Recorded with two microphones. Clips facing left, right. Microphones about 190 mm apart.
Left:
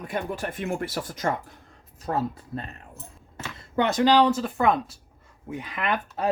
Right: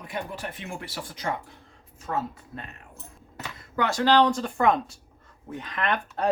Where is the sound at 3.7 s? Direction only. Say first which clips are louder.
Left 2 dB; 20° left (ahead or behind).